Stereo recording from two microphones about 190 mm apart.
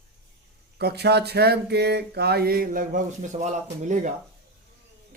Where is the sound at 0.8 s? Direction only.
60° right (ahead or behind); by 4.1 s 40° right (ahead or behind).